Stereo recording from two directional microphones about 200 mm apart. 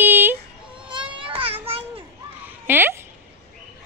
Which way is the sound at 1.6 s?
30° right (ahead or behind).